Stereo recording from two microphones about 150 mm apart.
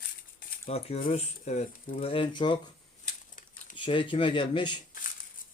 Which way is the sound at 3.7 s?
35° left (ahead or behind).